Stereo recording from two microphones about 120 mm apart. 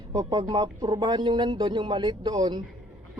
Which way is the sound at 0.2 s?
35° right (ahead or behind).